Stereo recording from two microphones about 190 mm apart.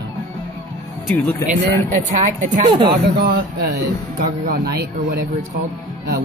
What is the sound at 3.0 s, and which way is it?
A man's voice, 55° right (ahead or behind).